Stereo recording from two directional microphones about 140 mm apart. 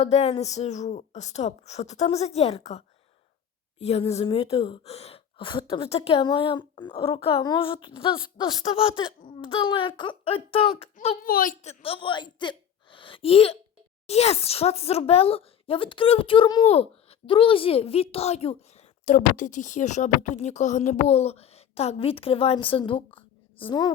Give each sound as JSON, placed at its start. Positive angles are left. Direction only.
{"t": 0.0, "sound": "speech", "side_deg": 50}
{"t": 11.2, "sound": "a woman's voice", "side_deg": 85}
{"t": 11.6, "sound": "a woman's voice", "side_deg": 45}